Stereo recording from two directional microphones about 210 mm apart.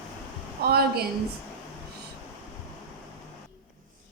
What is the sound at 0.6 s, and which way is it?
Speech, 50° right (ahead or behind).